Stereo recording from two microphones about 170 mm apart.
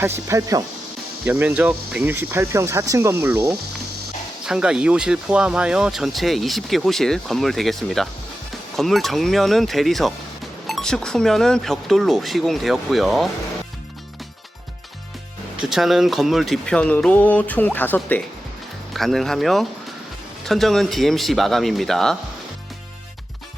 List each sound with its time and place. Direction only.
0.0 s speech: 15° right (ahead or behind)
4.4 s speech: 5° right (ahead or behind)
15.7 s speech: centre (ahead or behind)